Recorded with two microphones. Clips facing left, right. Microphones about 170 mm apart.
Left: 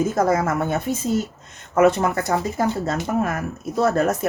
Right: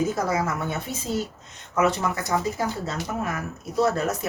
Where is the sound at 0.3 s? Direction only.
50° left (ahead or behind).